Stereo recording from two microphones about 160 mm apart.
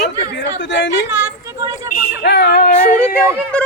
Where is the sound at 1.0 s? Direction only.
15° right (ahead or behind).